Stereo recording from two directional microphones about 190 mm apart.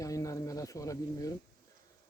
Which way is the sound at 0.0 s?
15° left (ahead or behind).